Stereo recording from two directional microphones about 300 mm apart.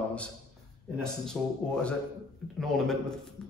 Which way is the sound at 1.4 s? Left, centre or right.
Centre.